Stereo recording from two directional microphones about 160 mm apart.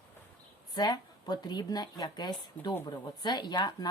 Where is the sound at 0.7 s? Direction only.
25° left (ahead or behind).